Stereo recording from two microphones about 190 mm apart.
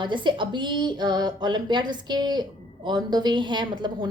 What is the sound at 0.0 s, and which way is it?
A woman's voice, 25° right (ahead or behind).